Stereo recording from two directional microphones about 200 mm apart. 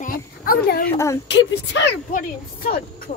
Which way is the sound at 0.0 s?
45° left (ahead or behind).